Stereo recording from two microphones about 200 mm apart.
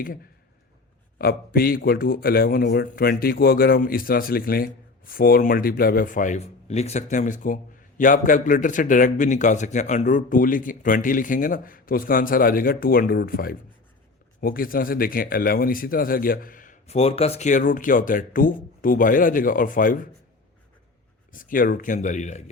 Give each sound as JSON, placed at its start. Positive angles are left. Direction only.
{"t": 1.2, "sound": "a man's voice", "side_deg": 50}
{"t": 21.3, "sound": "speech", "side_deg": 45}